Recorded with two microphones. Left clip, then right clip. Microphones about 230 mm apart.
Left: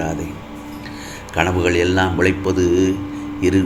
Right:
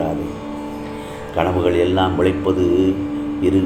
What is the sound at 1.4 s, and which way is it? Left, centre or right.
Speech, left.